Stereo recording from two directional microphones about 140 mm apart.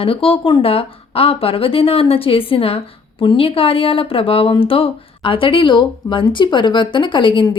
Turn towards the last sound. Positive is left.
turn(degrees=35)  # may be behind; listen again after turning